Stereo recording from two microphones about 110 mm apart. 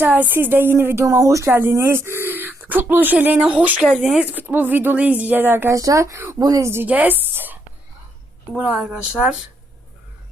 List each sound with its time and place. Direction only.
0.0 s a woman's voice: 15° right (ahead or behind); by 6.7 s 35° right (ahead or behind)
6.7 s a woman's voice: 15° right (ahead or behind)